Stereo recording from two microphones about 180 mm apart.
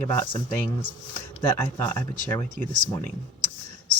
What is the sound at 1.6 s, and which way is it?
Speech, 10° left (ahead or behind).